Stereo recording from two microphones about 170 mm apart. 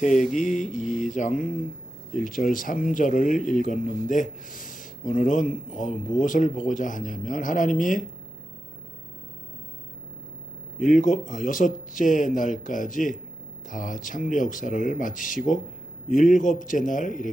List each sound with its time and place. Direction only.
0.0 s speech: 45° left (ahead or behind)
10.8 s speech: 50° left (ahead or behind)